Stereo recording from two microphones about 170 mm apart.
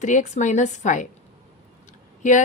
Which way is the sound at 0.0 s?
45° left (ahead or behind).